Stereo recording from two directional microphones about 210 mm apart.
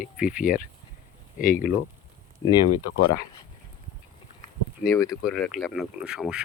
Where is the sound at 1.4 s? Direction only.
40° left (ahead or behind).